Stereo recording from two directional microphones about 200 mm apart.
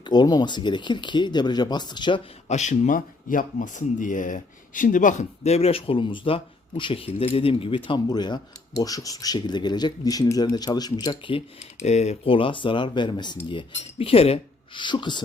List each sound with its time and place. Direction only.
0.0 s speech: 20° left (ahead or behind)
2.5 s speech: 35° left (ahead or behind)
11.8 s speech: 35° left (ahead or behind)